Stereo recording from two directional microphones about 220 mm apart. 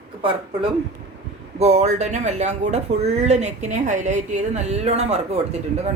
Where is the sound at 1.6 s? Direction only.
30° right (ahead or behind).